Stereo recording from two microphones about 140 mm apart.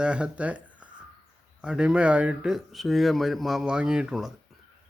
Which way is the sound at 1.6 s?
5° right (ahead or behind).